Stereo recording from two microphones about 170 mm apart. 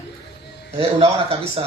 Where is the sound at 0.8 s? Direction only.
35° right (ahead or behind).